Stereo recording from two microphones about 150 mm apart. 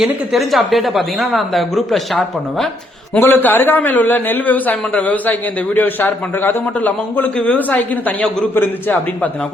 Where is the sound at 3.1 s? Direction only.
15° left (ahead or behind).